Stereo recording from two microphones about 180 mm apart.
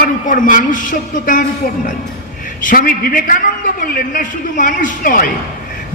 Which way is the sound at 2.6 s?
50° left (ahead or behind).